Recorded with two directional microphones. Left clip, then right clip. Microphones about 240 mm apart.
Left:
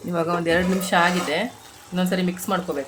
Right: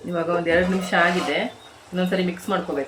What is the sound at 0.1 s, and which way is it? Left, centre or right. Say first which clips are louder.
Speech: even; left.